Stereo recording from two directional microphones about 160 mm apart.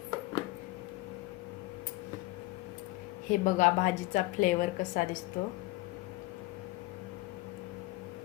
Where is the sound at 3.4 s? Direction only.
55° left (ahead or behind).